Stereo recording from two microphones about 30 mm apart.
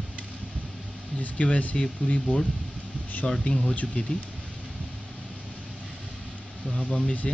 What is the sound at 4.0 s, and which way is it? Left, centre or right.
Speech, left.